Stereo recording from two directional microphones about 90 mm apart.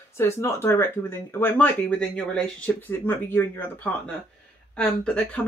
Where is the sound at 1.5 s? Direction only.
15° left (ahead or behind).